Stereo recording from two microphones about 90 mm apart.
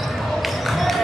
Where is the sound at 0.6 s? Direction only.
Centre (ahead or behind).